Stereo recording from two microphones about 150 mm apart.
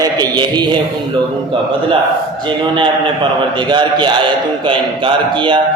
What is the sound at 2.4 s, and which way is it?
A man's voice, 30° right (ahead or behind).